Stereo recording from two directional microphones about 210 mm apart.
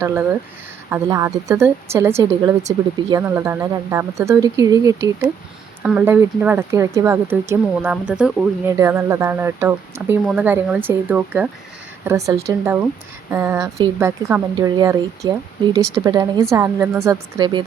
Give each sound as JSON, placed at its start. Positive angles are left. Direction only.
{"t": 0.0, "sound": "speech", "side_deg": -10}
{"t": 5.8, "sound": "speech", "side_deg": -5}